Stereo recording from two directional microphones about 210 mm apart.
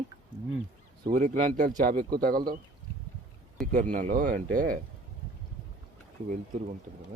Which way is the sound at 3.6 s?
40° right (ahead or behind).